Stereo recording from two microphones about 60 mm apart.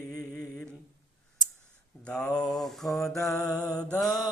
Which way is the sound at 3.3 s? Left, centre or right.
Left.